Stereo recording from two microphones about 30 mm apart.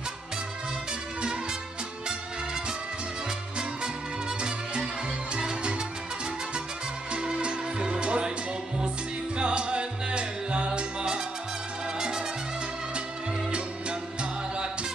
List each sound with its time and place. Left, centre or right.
4.4 s music: right
7.1 s music: right
9.4 s music: right